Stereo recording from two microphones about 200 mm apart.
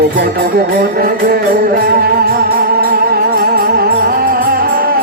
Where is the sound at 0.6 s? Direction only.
45° right (ahead or behind).